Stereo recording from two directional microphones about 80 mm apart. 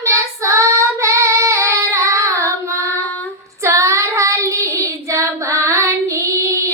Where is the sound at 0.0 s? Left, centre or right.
Right.